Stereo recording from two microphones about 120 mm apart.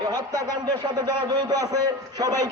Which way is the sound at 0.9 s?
35° right (ahead or behind).